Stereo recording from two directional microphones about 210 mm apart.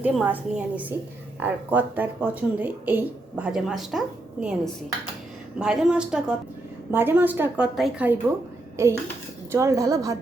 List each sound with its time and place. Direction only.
0.0 s a woman's voice: 5° right (ahead or behind)
8.7 s a sound: 15° right (ahead or behind)
9.5 s speech: 15° right (ahead or behind)